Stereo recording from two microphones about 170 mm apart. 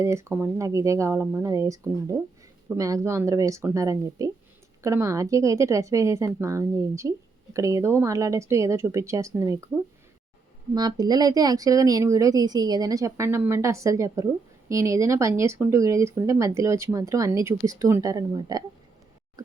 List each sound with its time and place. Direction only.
0.0 s speech: 15° right (ahead or behind)